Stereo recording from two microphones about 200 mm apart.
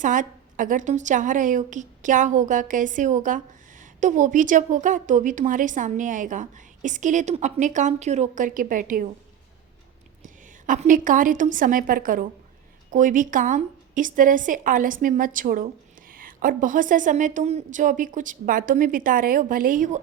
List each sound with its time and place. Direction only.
0.0 s a woman's voice: 40° right (ahead or behind)
10.2 s a woman's voice: 40° right (ahead or behind)